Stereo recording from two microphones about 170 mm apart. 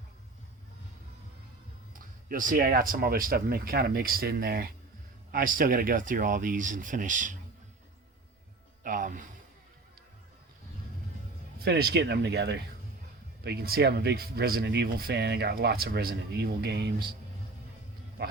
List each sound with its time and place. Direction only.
2.3 s speech: 55° right (ahead or behind)
8.8 s music: 55° right (ahead or behind)
11.6 s speech: 70° right (ahead or behind)